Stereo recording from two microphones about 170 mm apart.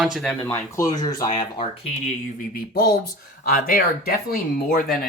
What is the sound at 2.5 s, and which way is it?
Speech, 60° left (ahead or behind).